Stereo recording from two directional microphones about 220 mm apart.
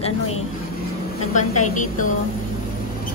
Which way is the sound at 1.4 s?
85° left.